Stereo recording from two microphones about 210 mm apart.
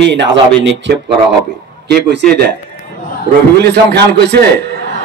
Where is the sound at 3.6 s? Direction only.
50° right (ahead or behind).